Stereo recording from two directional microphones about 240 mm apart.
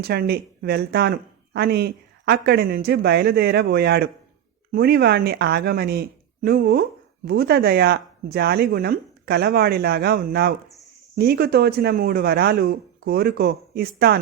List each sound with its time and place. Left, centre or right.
0.0 s speech: right